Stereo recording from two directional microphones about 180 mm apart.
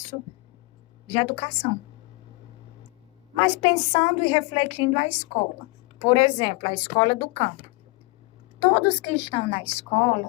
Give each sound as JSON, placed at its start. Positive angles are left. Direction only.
{"t": 1.0, "sound": "a woman's voice", "side_deg": 30}
{"t": 3.3, "sound": "a woman's voice", "side_deg": 30}
{"t": 8.5, "sound": "a woman's voice", "side_deg": 35}